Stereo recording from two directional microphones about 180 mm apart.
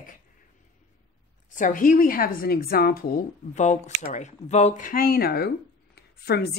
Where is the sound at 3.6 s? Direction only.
40° left (ahead or behind).